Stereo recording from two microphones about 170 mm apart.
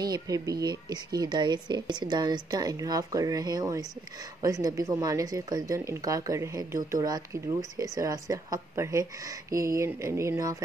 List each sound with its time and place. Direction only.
0.0 s speech: 20° right (ahead or behind)